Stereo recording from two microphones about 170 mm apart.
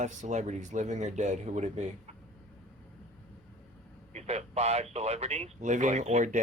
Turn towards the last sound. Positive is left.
turn(degrees=-45)  # may be behind; listen again after turning